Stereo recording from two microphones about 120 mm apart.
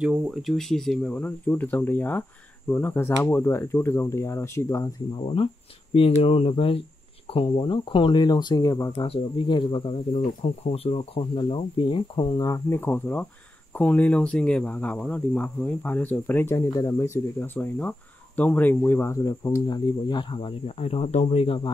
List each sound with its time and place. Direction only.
0.0 s speech: 5° right (ahead or behind); by 4.8 s 25° left (ahead or behind)
5.1 s speech: 45° left (ahead or behind); by 9.0 s 30° left (ahead or behind)
9.0 s speech: 45° left (ahead or behind)
10.6 s speech: 55° left (ahead or behind)